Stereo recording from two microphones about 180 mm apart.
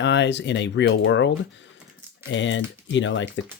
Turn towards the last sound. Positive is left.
turn(degrees=90)